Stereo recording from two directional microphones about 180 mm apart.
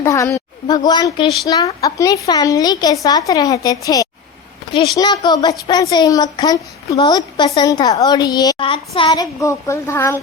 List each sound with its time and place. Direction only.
0.0 s a woman's voice: 15° left (ahead or behind)